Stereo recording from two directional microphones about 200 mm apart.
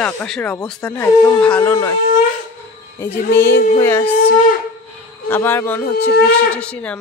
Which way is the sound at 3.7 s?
10° left (ahead or behind).